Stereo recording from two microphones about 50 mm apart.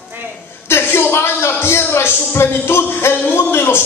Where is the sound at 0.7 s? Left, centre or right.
Left.